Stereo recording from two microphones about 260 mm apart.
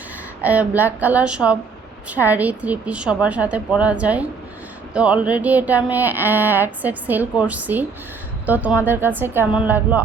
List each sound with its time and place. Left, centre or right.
0.4 s a woman's voice: centre